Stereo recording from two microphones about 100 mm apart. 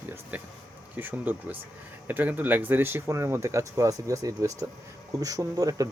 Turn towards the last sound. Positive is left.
turn(degrees=-35)  # may be behind; listen again after turning